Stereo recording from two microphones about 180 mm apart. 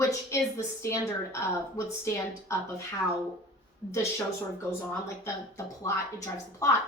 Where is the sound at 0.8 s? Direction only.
15° left (ahead or behind).